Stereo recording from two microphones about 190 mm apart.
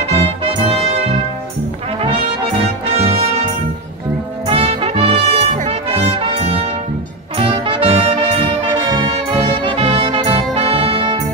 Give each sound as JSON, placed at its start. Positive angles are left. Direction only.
{"t": 0.1, "sound": "music", "side_deg": -30}
{"t": 3.0, "sound": "music", "side_deg": -30}
{"t": 4.5, "sound": "music", "side_deg": -30}
{"t": 8.8, "sound": "music", "side_deg": -25}